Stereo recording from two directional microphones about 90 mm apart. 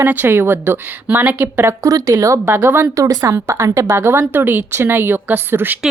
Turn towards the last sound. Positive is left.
turn(degrees=-25)  # may be behind; listen again after turning